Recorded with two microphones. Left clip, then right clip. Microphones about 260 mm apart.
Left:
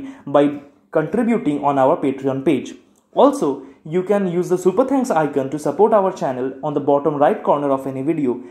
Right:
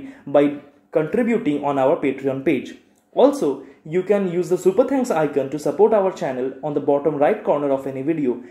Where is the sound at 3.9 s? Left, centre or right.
Left.